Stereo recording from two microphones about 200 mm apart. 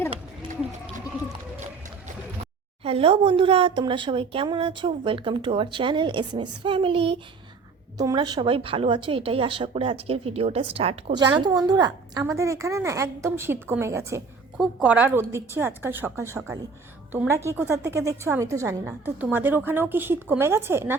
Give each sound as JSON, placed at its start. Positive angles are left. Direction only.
{"t": 2.8, "sound": "a woman's voice", "side_deg": -30}